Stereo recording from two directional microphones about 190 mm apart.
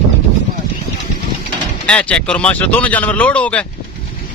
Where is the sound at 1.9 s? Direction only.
5° left (ahead or behind).